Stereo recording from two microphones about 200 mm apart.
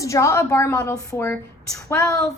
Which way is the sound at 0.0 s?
15° left (ahead or behind).